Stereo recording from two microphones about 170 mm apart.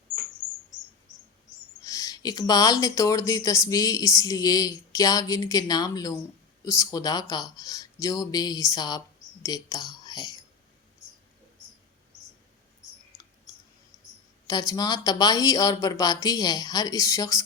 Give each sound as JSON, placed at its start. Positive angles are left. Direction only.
{"t": 1.8, "sound": "speech", "side_deg": 20}
{"t": 14.4, "sound": "speech", "side_deg": 20}